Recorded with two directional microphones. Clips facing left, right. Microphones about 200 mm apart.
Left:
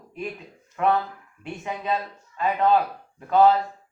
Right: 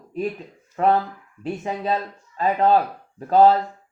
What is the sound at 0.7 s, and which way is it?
Speech, 35° right (ahead or behind).